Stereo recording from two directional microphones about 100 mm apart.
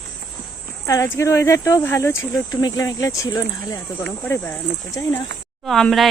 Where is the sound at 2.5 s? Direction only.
40° left (ahead or behind).